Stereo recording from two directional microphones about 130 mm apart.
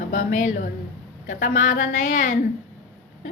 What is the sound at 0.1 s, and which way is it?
Speech, 75° left (ahead or behind).